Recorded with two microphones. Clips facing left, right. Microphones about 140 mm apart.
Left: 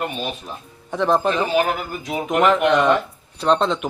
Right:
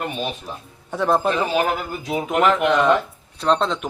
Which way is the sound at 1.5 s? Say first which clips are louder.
Left 1 dB; 20° right (ahead or behind).